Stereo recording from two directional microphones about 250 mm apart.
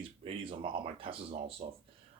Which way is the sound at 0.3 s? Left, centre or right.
Right.